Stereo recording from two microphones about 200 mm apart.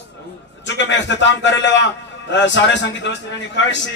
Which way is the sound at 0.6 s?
65° left (ahead or behind).